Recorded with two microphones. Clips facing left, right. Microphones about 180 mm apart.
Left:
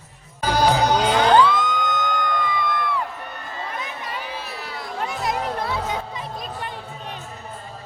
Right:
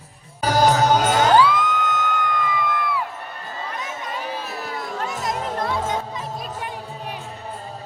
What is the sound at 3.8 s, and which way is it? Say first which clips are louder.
Music: right 2 dB; 45° right (ahead or behind).